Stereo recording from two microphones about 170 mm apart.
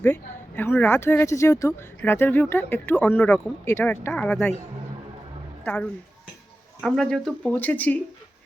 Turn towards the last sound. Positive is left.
turn(degrees=10)  # may be behind; listen again after turning